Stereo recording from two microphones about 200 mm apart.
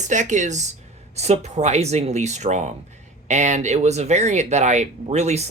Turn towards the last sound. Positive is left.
turn(degrees=-35)  # may be behind; listen again after turning